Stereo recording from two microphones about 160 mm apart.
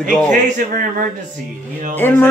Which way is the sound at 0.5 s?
55° right (ahead or behind).